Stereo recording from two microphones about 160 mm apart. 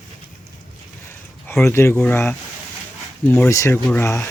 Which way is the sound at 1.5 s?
15° left (ahead or behind).